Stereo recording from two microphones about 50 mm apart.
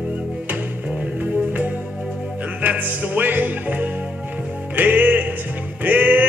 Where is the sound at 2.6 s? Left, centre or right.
Right.